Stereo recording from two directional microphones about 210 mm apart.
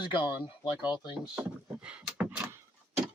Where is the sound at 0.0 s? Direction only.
25° left (ahead or behind).